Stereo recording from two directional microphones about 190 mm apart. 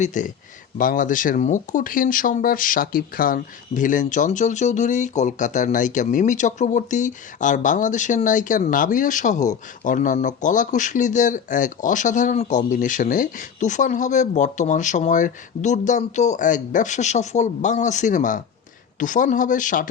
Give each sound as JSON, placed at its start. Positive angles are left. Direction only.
{"t": 0.0, "sound": "speech", "side_deg": 40}